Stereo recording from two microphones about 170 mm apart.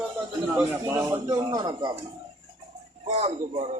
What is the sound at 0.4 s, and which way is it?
A man's voice, 10° right (ahead or behind).